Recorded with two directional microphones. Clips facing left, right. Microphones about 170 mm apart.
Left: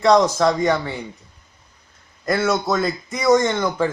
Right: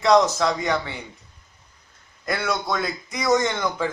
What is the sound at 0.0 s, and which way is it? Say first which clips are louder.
Speech: left 3 dB; 50° left (ahead or behind).